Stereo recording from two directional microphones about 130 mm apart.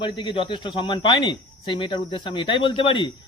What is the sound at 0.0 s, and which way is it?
Speech, 40° left (ahead or behind).